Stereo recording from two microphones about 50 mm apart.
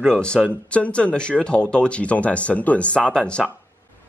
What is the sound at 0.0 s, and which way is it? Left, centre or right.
Speech, centre.